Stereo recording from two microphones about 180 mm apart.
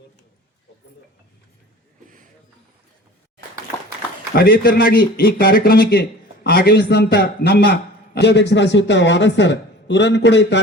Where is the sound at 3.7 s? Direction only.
5° left (ahead or behind).